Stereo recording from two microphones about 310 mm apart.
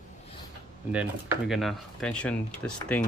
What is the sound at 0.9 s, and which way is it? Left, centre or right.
Speech, centre.